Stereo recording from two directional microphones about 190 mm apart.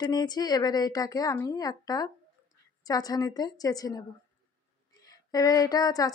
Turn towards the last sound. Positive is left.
turn(degrees=20)  # may be behind; listen again after turning